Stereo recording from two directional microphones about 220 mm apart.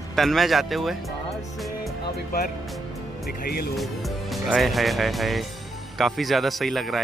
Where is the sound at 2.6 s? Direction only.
Centre (ahead or behind).